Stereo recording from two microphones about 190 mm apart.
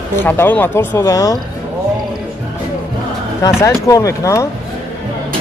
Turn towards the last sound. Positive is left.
turn(degrees=15)  # may be behind; listen again after turning